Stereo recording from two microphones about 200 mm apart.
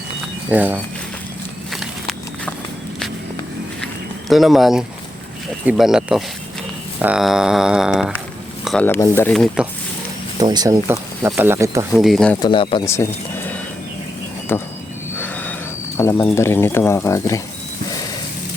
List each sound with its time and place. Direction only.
0.5 s speech: 10° right (ahead or behind)
1.7 s walk: centre (ahead or behind)
4.3 s speech: centre (ahead or behind)
9.3 s speech: centre (ahead or behind)
10.3 s speech: 20° right (ahead or behind)
11.9 s speech: centre (ahead or behind)
12.4 s speech: 25° left (ahead or behind)
12.9 s speech: 10° left (ahead or behind)
15.2 s a sound: 10° left (ahead or behind)
16.0 s speech: 10° left (ahead or behind)